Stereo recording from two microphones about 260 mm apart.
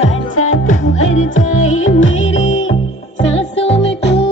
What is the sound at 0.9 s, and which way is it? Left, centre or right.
Music, left.